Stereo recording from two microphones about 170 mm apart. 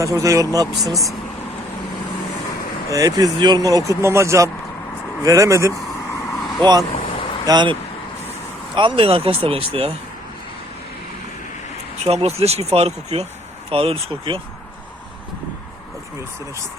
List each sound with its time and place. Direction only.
0.0 s speech: 20° right (ahead or behind)
2.9 s speech: 20° right (ahead or behind)
6.1 s vehicle: 15° left (ahead or behind)
6.9 s vehicle: 30° left (ahead or behind)
7.4 s speech: 25° right (ahead or behind)
12.0 s speech: 35° right (ahead or behind)